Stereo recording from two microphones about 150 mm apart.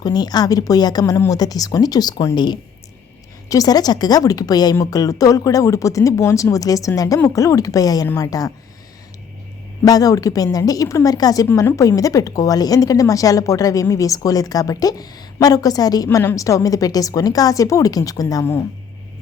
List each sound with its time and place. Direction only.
0.0 s a woman's voice: 25° left (ahead or behind)
9.8 s a woman's voice: 25° left (ahead or behind)